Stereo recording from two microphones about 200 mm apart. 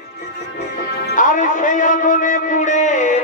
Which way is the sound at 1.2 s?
40° left (ahead or behind).